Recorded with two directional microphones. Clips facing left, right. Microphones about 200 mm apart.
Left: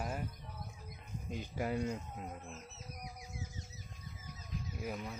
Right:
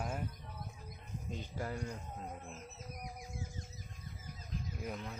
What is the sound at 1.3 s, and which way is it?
Speech, 10° left (ahead or behind).